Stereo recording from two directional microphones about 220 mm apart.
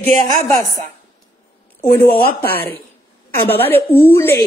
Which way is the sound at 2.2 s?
45° left (ahead or behind).